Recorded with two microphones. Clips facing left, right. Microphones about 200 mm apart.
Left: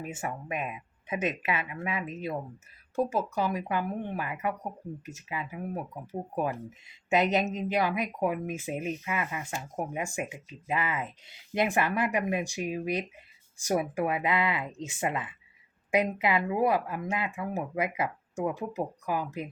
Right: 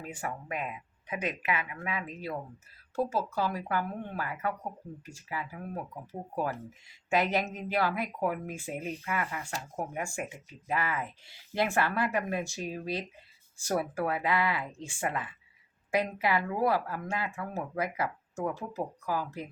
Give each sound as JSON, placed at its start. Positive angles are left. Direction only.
{"t": 0.0, "sound": "speech", "side_deg": 20}